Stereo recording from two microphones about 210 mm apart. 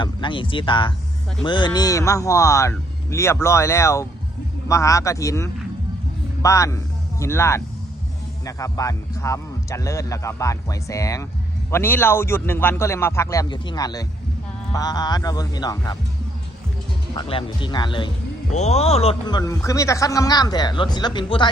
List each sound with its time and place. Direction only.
0.0 s speech: 25° left (ahead or behind)
17.2 s speech: 25° left (ahead or behind)
19.4 s speech: 15° left (ahead or behind)